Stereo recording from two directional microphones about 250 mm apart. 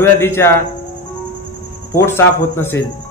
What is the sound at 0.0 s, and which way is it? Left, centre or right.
Speech, centre.